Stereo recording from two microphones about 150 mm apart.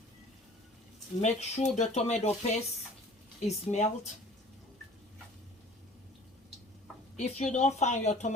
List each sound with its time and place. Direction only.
1.2 s speech: 50° left (ahead or behind)
7.2 s speech: 50° left (ahead or behind)